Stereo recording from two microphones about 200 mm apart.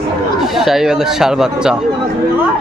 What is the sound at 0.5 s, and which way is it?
Speech, centre (ahead or behind).